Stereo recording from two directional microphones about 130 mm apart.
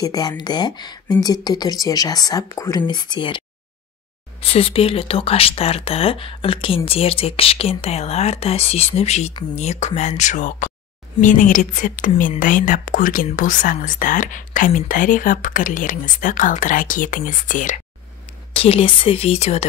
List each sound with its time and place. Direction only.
0.0 s a woman's voice: 30° left (ahead or behind); by 17.7 s 85° left
18.5 s speech: 45° left (ahead or behind)